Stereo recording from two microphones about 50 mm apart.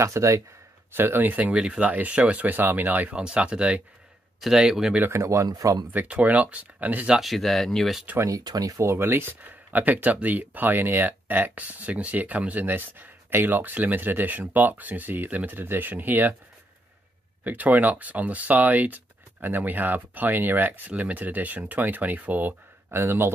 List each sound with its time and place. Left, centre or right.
0.0 s speech: right
0.9 s speech: right
1.5 s speech: right
3.2 s speech: right
4.6 s speech: centre
5.1 s speech: right
6.0 s speech: right
7.2 s speech: centre
8.9 s speech: right
17.4 s speech: right
22.9 s speech: right